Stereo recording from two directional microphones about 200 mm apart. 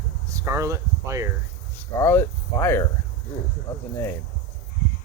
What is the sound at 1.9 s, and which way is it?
Speech, 15° left (ahead or behind).